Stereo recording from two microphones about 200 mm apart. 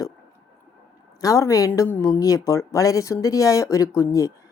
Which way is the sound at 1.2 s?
15° left (ahead or behind).